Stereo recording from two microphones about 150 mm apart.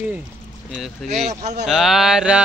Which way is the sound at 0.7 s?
Centre (ahead or behind).